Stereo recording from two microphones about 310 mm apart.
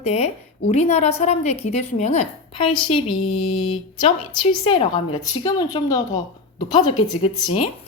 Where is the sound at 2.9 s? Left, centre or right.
Left.